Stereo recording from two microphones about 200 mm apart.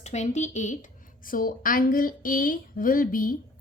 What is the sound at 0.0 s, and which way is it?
A woman's voice, 35° left (ahead or behind).